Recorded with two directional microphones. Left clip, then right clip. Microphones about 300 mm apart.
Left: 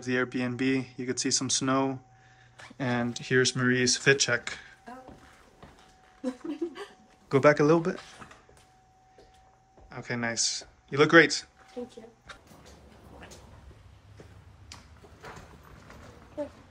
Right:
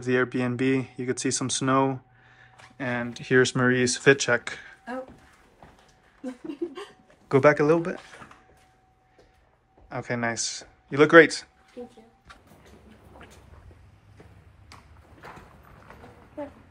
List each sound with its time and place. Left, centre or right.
0.0 s speech: centre
7.2 s speech: centre
9.8 s speech: centre